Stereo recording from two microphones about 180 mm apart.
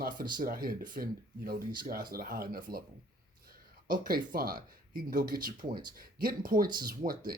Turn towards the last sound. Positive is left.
turn(degrees=-50)  # may be behind; listen again after turning